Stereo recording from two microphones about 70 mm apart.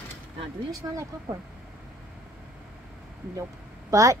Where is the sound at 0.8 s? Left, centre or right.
Right.